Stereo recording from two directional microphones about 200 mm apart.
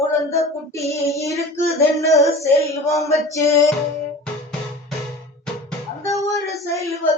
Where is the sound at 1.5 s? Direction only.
15° left (ahead or behind).